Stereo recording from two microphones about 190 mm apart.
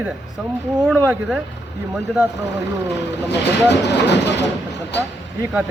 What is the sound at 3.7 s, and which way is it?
Speech, 65° left (ahead or behind).